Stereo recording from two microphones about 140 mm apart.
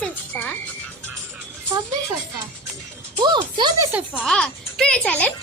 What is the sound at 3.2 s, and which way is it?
Speech, 35° right (ahead or behind).